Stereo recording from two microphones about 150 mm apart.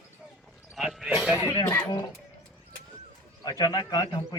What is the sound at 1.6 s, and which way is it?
Speech, 15° left (ahead or behind).